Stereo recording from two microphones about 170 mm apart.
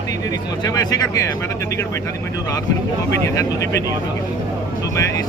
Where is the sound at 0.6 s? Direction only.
20° left (ahead or behind).